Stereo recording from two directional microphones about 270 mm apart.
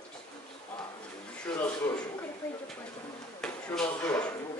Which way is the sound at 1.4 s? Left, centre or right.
Centre.